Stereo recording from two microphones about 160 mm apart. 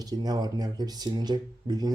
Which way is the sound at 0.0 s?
25° right (ahead or behind).